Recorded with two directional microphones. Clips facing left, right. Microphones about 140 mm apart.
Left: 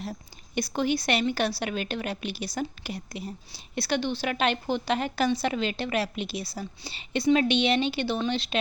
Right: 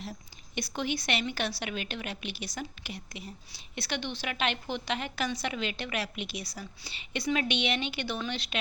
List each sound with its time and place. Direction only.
0.0 s a woman's voice: 45° left (ahead or behind)